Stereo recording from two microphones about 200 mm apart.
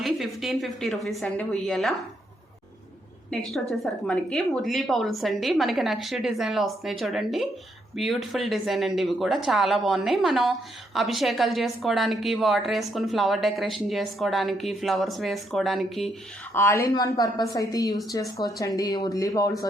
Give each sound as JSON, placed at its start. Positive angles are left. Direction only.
{"t": 0.0, "sound": "a woman's voice", "side_deg": 0}
{"t": 3.2, "sound": "a woman's voice", "side_deg": 0}
{"t": 16.6, "sound": "a woman's voice", "side_deg": 15}